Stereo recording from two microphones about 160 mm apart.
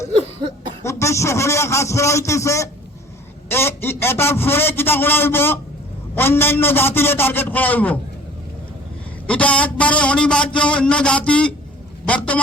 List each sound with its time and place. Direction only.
0.8 s speech: 15° left (ahead or behind)
9.2 s speech: 10° left (ahead or behind)